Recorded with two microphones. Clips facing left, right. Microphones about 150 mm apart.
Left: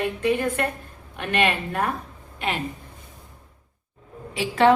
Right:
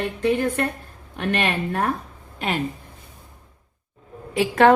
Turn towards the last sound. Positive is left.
turn(degrees=-50)  # may be behind; listen again after turning